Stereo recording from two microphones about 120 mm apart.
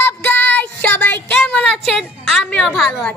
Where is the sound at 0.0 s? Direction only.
15° left (ahead or behind).